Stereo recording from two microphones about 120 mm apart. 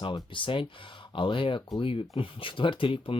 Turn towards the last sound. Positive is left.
turn(degrees=45)  # may be behind; listen again after turning